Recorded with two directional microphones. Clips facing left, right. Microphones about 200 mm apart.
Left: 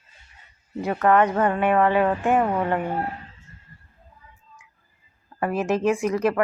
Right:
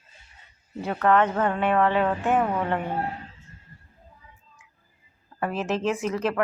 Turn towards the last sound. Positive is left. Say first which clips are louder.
# left 4 dB
turn(degrees=10)  # may be behind; listen again after turning